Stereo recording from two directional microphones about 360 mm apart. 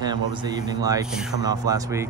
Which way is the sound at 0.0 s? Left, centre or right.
Centre.